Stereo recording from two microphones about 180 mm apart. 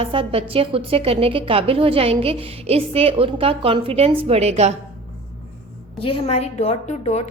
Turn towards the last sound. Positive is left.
turn(degrees=35)  # may be behind; listen again after turning